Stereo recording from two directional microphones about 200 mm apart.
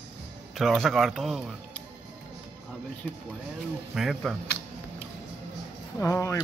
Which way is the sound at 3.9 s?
Centre (ahead or behind).